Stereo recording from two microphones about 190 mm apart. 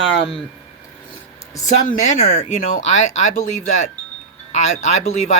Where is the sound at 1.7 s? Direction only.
40° left (ahead or behind).